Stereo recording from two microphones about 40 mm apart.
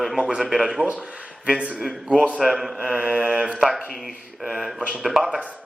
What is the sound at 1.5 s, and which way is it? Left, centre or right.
Mantra, right.